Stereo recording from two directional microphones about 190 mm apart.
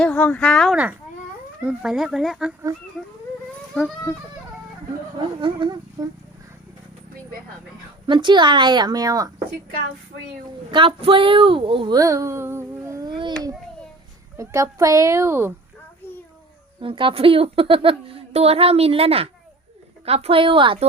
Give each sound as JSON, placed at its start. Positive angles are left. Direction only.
{"t": 0.0, "sound": "speech", "side_deg": 5}
{"t": 5.4, "sound": "speech", "side_deg": -25}
{"t": 8.0, "sound": "speech", "side_deg": -25}
{"t": 10.7, "sound": "speech", "side_deg": -25}
{"t": 14.3, "sound": "speech", "side_deg": -15}
{"t": 16.8, "sound": "speech", "side_deg": -25}